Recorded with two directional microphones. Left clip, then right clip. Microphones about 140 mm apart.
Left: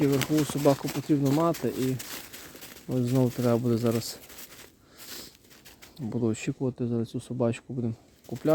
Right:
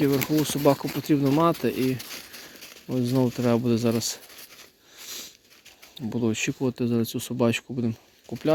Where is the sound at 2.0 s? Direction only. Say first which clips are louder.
Right 2 dB; 45° left (ahead or behind).